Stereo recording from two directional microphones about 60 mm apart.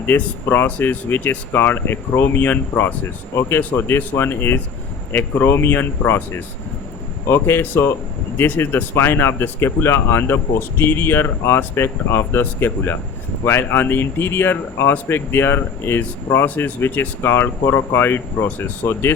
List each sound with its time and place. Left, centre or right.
0.1 s speech: left
0.4 s speech: left
3.8 s speech: left
18.8 s speech: left